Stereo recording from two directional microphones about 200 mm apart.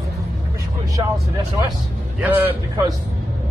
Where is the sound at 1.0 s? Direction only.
20° right (ahead or behind).